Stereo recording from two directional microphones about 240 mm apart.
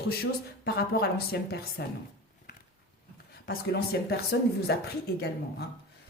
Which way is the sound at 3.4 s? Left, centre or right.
Left.